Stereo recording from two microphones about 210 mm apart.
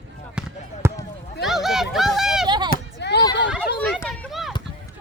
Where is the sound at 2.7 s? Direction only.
55° left (ahead or behind).